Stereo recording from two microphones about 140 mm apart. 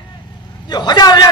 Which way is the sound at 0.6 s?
30° left (ahead or behind).